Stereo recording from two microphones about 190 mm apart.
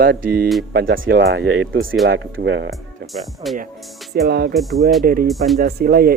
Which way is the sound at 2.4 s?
70° right (ahead or behind).